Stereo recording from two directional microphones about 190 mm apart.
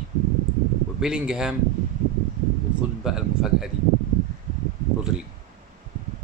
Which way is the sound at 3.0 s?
5° right (ahead or behind).